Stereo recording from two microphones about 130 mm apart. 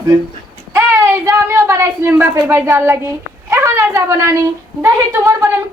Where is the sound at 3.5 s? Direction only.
20° right (ahead or behind).